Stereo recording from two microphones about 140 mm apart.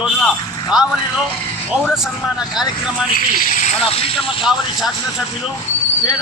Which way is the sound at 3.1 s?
75° left (ahead or behind).